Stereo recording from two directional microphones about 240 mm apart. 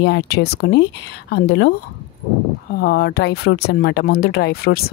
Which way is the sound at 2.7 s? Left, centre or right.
Left.